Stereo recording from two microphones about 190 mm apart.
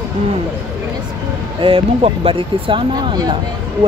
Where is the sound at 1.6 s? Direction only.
30° right (ahead or behind).